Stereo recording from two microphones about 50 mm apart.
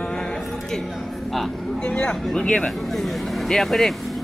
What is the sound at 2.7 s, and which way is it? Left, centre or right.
Speech, centre.